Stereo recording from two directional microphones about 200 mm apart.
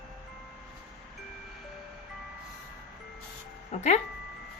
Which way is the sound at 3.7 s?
35° left (ahead or behind).